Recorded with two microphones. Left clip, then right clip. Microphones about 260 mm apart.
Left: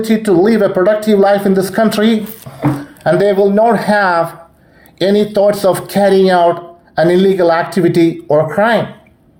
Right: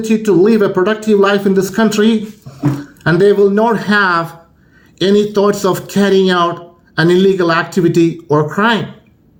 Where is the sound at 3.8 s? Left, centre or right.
Centre.